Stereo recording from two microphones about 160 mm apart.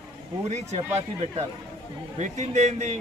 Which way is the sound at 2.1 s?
45° right (ahead or behind).